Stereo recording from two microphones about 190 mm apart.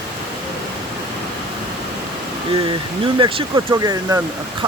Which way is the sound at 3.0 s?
25° right (ahead or behind).